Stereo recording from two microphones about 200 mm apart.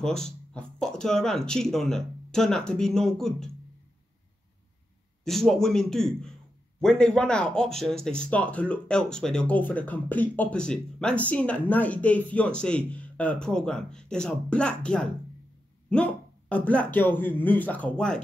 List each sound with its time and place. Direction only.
0.0 s speech: 5° left (ahead or behind)
5.2 s a man's voice: centre (ahead or behind)